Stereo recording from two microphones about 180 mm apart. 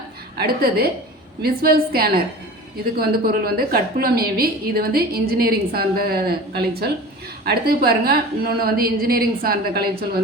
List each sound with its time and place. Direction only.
0.3 s a woman's voice: 60° right (ahead or behind)